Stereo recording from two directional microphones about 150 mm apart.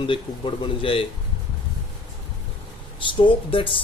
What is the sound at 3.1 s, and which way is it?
Speech, 35° left (ahead or behind).